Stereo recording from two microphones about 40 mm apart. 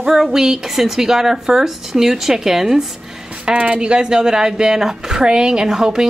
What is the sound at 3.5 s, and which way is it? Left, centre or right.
Speech, right.